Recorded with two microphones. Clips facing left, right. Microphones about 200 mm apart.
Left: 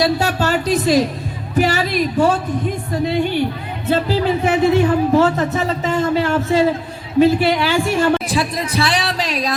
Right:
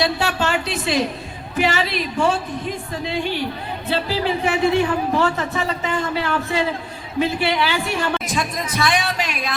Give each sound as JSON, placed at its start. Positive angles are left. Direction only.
{"t": 0.0, "sound": "a woman's voice", "side_deg": 40}